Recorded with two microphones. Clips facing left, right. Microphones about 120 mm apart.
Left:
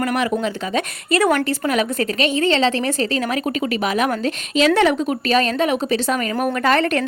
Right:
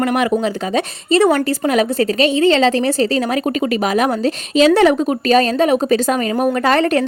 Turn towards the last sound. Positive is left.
turn(degrees=-35)  # may be behind; listen again after turning